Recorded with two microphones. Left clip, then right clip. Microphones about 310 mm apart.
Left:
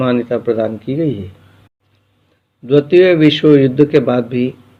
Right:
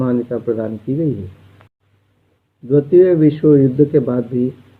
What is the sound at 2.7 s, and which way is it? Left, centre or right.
A man's voice, centre.